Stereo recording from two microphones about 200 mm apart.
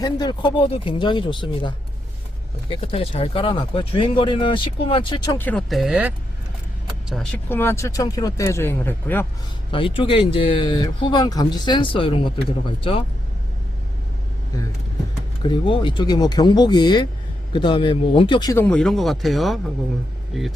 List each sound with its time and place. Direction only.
0.0 s speech: 20° left (ahead or behind)
9.7 s speech: 25° left (ahead or behind)
15.4 s speech: 25° left (ahead or behind)
18.6 s speech: 5° left (ahead or behind)